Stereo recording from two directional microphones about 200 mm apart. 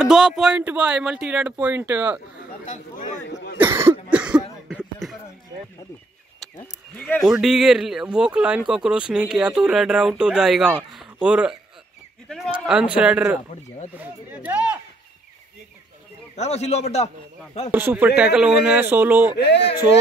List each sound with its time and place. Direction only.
0.0 s speech: 5° right (ahead or behind)
2.6 s speech: 40° left (ahead or behind)
3.5 s cough: 15° right (ahead or behind)
6.6 s speech: 5° left (ahead or behind)
16.3 s speech: 35° left (ahead or behind)
17.6 s speech: 10° right (ahead or behind)
19.3 s speech: 60° left (ahead or behind)